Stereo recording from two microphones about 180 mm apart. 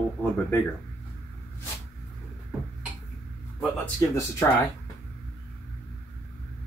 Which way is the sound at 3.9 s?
15° left (ahead or behind).